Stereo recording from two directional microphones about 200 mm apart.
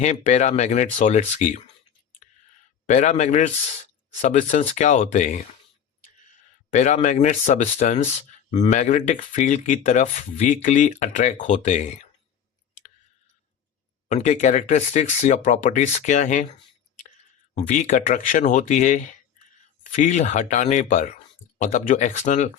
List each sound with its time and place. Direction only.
0.0 s speech: 35° left (ahead or behind)
2.8 s speech: 35° left (ahead or behind)
6.7 s speech: 35° left (ahead or behind)
14.1 s speech: 35° left (ahead or behind)
17.5 s speech: 40° left (ahead or behind)